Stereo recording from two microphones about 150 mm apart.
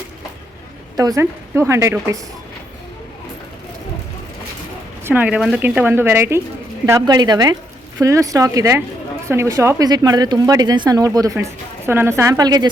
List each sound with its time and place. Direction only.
0.9 s speech: 25° right (ahead or behind)
5.0 s speech: 10° right (ahead or behind); by 12.7 s 25° right (ahead or behind)